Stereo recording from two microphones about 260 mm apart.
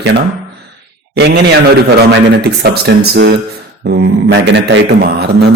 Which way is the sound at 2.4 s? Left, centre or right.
Right.